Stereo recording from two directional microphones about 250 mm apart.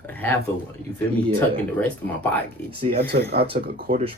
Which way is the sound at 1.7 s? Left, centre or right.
Centre.